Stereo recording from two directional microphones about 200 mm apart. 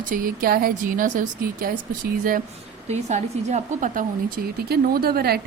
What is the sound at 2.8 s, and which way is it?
Speech, 35° right (ahead or behind).